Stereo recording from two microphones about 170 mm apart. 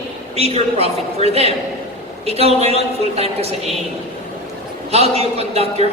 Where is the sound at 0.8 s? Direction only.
35° right (ahead or behind).